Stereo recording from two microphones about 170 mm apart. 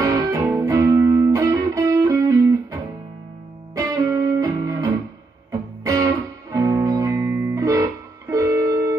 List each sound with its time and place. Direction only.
0.0 s music: 20° right (ahead or behind)